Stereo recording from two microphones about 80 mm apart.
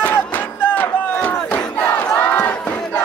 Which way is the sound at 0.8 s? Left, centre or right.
Centre.